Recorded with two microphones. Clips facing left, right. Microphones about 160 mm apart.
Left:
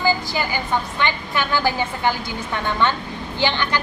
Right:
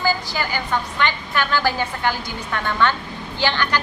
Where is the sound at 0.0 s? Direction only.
15° left (ahead or behind).